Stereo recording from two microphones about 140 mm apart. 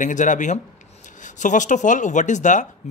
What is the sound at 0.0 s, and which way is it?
Speech, 65° left (ahead or behind).